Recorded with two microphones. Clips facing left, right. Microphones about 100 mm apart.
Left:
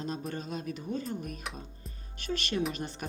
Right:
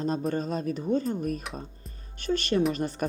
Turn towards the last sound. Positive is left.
turn(degrees=-45)  # may be behind; listen again after turning